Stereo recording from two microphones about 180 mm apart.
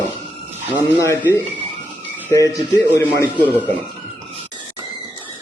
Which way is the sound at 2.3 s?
20° left (ahead or behind).